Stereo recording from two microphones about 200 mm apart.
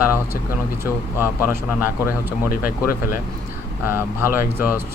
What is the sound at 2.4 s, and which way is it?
Speech, 45° left (ahead or behind).